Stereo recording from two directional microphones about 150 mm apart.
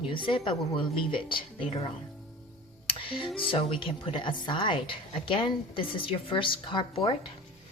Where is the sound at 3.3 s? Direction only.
35° left (ahead or behind).